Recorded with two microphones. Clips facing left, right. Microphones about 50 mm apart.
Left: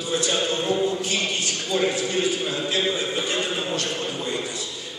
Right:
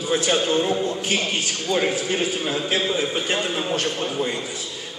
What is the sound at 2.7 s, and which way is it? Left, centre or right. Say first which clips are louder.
A man's voice: right 2 dB; right.